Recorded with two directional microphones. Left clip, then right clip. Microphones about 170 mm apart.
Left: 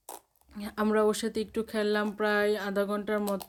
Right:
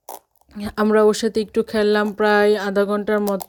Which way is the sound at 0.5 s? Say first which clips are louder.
Right 10 dB; 45° right (ahead or behind).